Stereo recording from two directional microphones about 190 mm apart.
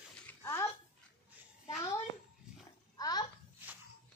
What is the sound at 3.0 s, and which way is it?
Babbling, 20° left (ahead or behind).